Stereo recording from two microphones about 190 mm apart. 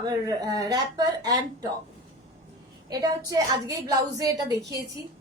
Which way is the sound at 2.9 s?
20° right (ahead or behind).